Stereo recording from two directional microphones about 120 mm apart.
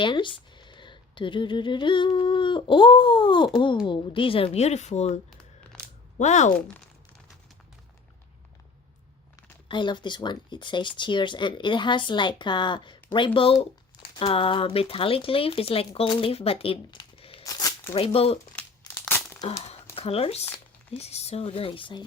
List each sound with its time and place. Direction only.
0.0 s speech: 40° left (ahead or behind); by 5.2 s 70° left (ahead or behind)
5.7 s a sound: 5° left (ahead or behind)
6.1 s speech: 75° left (ahead or behind)
9.6 s speech: 40° left (ahead or behind)
17.4 s a sound: 30° left (ahead or behind)
17.9 s speech: 55° left (ahead or behind)
18.9 s crumpling: 15° left (ahead or behind)
20.0 s speech: 55° left (ahead or behind)